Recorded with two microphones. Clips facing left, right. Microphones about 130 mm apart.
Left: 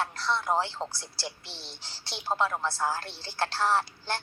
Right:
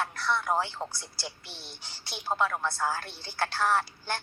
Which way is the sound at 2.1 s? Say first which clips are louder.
Even; centre (ahead or behind).